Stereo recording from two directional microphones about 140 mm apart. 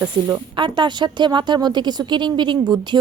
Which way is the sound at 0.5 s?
35° right (ahead or behind).